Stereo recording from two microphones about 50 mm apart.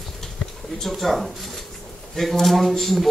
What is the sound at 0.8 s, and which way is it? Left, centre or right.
Speech, centre.